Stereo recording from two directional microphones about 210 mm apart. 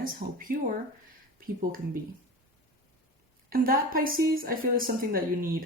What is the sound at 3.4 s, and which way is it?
Speech, 45° right (ahead or behind).